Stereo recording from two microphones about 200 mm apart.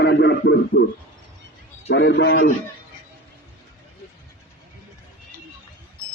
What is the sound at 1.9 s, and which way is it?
Speech, 55° left (ahead or behind).